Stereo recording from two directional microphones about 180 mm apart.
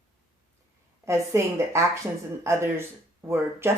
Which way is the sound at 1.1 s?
15° right (ahead or behind).